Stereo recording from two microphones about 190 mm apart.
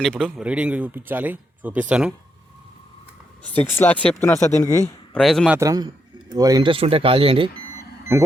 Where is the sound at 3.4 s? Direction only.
10° left (ahead or behind).